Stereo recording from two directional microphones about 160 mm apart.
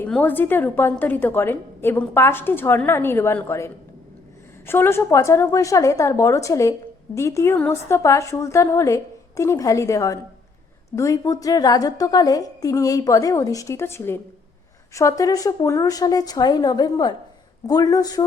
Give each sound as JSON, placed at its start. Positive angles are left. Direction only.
{"t": 0.0, "sound": "a woman's voice", "side_deg": 10}